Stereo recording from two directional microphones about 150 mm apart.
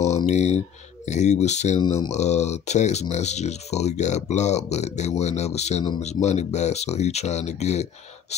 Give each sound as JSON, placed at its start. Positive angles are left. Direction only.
{"t": 0.3, "sound": "speech", "side_deg": 50}